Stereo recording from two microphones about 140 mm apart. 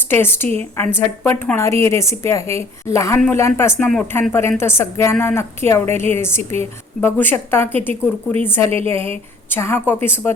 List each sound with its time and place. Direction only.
0.1 s a woman's voice: 15° left (ahead or behind)
8.7 s a woman's voice: 45° right (ahead or behind)
9.5 s speech: 15° left (ahead or behind)